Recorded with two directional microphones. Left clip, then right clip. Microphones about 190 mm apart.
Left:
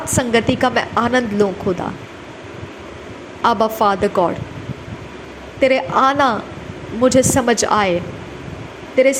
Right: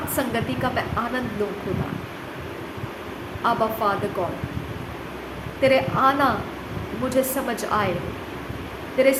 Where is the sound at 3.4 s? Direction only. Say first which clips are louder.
Left 7 dB; 45° left (ahead or behind).